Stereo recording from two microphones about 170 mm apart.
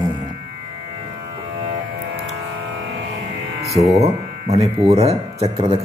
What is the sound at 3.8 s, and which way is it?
Speech, 35° right (ahead or behind).